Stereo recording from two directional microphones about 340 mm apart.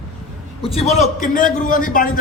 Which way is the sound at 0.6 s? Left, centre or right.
Centre.